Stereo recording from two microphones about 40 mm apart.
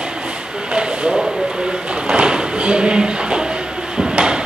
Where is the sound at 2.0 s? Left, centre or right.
Right.